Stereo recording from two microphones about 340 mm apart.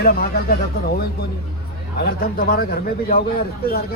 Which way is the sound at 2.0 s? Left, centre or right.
Left.